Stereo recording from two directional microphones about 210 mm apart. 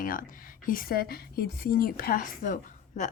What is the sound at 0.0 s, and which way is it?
A woman's voice, 40° left (ahead or behind).